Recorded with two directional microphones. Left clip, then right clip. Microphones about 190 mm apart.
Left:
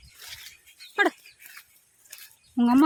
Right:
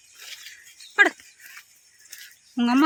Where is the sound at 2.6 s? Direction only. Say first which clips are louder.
Even; 15° left (ahead or behind).